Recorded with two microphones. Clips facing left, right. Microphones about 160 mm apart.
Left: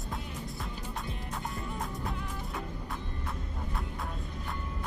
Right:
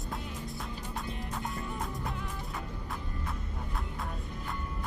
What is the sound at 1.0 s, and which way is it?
Music, centre (ahead or behind).